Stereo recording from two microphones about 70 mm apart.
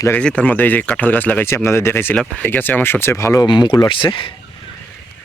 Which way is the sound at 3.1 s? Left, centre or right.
Left.